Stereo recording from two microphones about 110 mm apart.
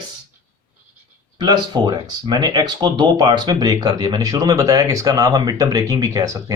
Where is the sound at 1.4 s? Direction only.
40° right (ahead or behind).